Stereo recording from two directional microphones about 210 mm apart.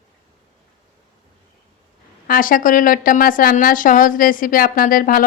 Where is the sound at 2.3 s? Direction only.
40° left (ahead or behind).